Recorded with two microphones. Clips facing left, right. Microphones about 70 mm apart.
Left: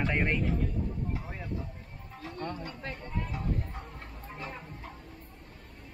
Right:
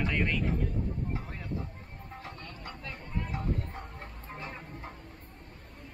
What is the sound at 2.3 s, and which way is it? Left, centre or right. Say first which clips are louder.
Speech: left 7 dB; left.